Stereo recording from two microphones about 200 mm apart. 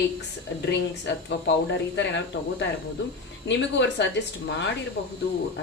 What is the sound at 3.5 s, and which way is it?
Speech, 65° left (ahead or behind).